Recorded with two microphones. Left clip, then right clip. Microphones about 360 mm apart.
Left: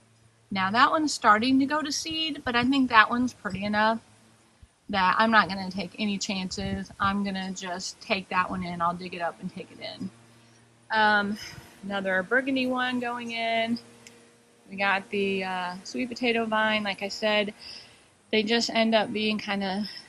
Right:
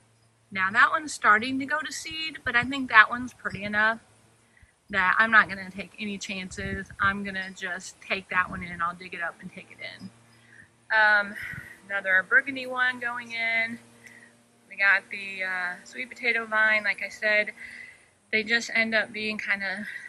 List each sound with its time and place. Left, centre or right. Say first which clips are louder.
0.5 s a woman's voice: even; centre